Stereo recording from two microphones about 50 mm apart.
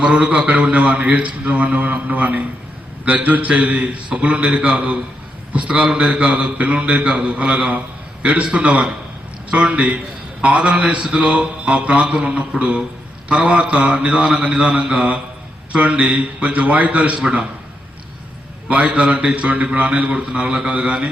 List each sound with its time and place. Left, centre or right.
0.0 s a man's voice: right
14.7 s mantra: centre
14.9 s a man's voice: right
18.9 s a man's voice: right